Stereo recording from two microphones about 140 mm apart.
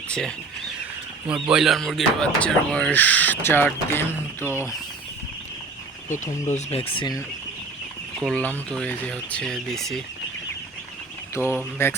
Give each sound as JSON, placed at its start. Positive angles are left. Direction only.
{"t": 0.1, "sound": "speech", "side_deg": 5}
{"t": 1.3, "sound": "speech", "side_deg": -5}
{"t": 6.5, "sound": "speech", "side_deg": 45}
{"t": 8.2, "sound": "speech", "side_deg": 5}
{"t": 11.4, "sound": "speech", "side_deg": -10}
{"t": 11.8, "sound": "speech", "side_deg": 15}